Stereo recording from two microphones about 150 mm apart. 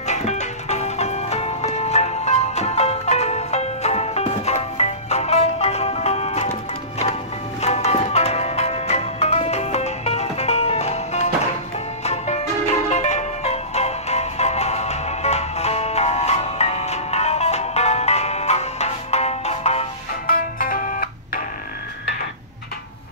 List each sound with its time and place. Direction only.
0.0 s music: 50° left (ahead or behind)
7.6 s music: 45° left (ahead or behind)
20.2 s music: 70° left (ahead or behind)